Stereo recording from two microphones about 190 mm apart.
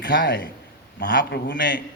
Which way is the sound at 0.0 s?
65° left (ahead or behind).